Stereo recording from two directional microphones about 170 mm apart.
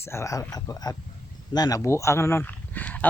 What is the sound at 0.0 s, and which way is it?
Speech, 15° left (ahead or behind).